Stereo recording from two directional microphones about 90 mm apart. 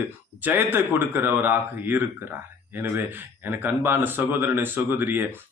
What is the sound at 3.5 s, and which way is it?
Speech, 25° right (ahead or behind).